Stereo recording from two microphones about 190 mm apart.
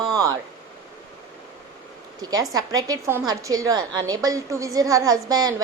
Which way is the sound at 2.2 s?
20° right (ahead or behind).